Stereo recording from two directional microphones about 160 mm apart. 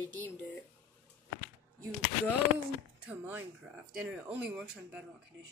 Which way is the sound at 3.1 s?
10° right (ahead or behind).